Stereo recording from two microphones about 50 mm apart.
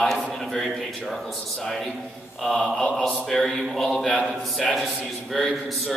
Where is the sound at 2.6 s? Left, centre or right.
Centre.